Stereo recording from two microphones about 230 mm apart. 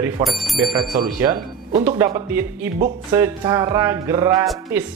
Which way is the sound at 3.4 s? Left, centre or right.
Centre.